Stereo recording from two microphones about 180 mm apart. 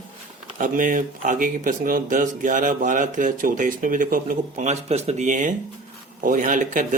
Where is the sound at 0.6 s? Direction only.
45° right (ahead or behind).